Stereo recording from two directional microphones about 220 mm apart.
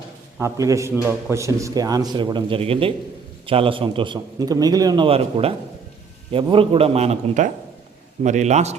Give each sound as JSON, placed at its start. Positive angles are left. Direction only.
{"t": 0.3, "sound": "a man's voice", "side_deg": -15}